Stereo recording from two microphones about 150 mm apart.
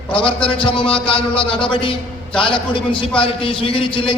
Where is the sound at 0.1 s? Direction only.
35° left (ahead or behind).